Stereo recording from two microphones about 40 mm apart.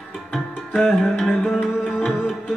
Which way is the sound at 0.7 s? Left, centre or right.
Centre.